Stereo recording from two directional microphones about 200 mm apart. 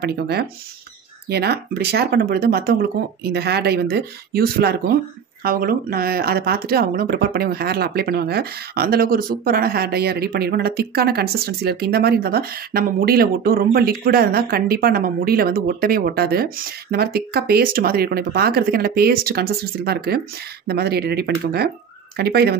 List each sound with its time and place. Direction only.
0.0 s speech: 55° right (ahead or behind)